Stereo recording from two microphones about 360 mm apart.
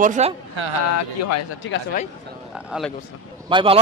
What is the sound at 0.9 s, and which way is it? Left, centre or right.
Speech, left.